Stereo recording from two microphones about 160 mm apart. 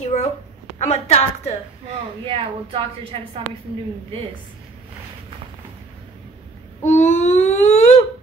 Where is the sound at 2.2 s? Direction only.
35° right (ahead or behind).